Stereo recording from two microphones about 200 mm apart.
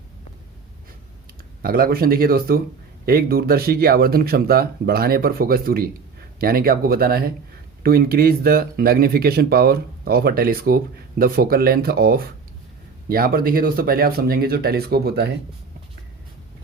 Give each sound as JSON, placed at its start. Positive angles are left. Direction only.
{"t": 1.6, "sound": "speech", "side_deg": -50}